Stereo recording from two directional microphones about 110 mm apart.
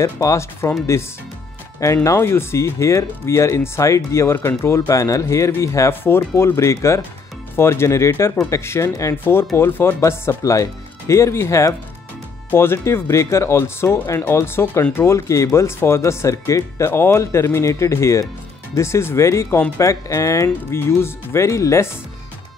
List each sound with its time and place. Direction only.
0.0 s speech: 25° left (ahead or behind)
2.0 s speech: 25° left (ahead or behind)